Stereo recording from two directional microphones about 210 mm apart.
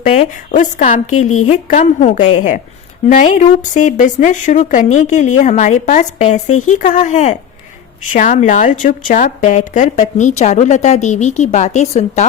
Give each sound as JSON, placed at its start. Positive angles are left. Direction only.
{"t": 0.0, "sound": "a woman's voice", "side_deg": 35}